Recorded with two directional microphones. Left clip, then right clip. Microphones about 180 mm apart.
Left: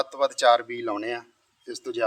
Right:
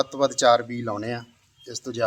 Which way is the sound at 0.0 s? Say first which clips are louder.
Right 1 dB; 30° left (ahead or behind).